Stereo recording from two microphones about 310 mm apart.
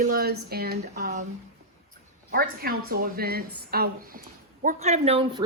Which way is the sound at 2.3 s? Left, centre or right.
Right.